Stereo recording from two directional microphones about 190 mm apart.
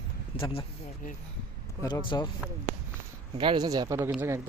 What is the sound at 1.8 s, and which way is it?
Speech, 20° left (ahead or behind).